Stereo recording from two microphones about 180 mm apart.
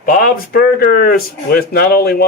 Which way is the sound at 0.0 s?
50° left (ahead or behind).